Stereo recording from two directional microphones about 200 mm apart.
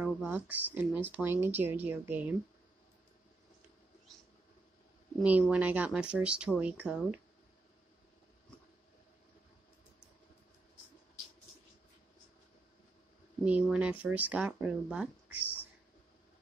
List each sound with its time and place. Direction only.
0.0 s speech: 10° right (ahead or behind)
5.2 s speech: 5° right (ahead or behind)
13.5 s speech: 5° right (ahead or behind)